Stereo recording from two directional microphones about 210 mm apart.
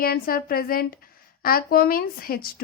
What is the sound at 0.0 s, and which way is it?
A woman's voice, 45° left (ahead or behind).